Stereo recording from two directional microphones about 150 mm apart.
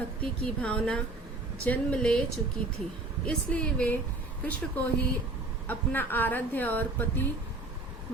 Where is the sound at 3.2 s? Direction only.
10° left (ahead or behind).